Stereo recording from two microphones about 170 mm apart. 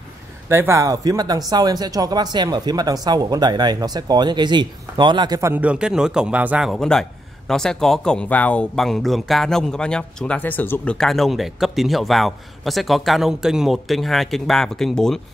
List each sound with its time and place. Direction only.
0.5 s speech: 15° right (ahead or behind)
5.5 s a man's voice: 5° right (ahead or behind)